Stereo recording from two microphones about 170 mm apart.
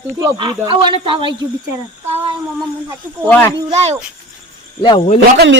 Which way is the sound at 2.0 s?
40° right (ahead or behind).